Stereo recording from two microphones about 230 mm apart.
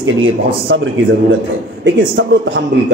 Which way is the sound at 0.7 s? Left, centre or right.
Right.